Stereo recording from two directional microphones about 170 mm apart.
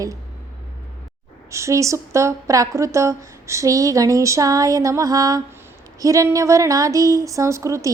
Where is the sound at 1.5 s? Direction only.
15° right (ahead or behind).